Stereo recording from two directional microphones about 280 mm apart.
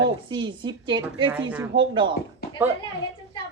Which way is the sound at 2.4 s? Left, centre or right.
Left.